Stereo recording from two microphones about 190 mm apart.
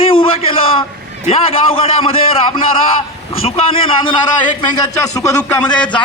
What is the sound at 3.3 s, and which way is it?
Speech, 30° left (ahead or behind).